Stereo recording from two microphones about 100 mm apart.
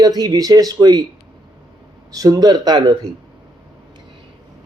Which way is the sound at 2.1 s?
40° right (ahead or behind).